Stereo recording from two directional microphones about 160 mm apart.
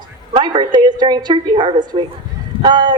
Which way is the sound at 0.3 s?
30° right (ahead or behind).